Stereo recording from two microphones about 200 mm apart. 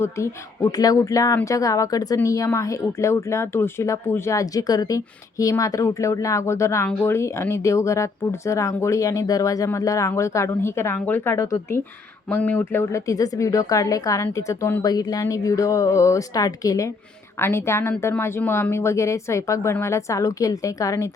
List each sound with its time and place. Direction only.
0.0 s speech: 15° left (ahead or behind)